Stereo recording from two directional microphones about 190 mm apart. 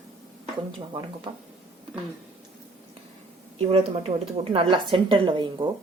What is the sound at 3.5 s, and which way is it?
A woman's voice, 30° right (ahead or behind).